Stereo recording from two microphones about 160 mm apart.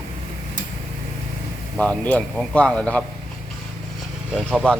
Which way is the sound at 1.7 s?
10° left (ahead or behind).